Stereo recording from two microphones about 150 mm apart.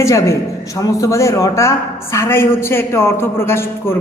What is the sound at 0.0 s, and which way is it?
A man's voice, 20° left (ahead or behind).